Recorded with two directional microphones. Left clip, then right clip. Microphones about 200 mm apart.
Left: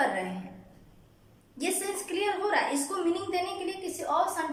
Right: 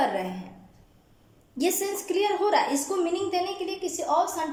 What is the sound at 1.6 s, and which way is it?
A woman's voice, 20° right (ahead or behind).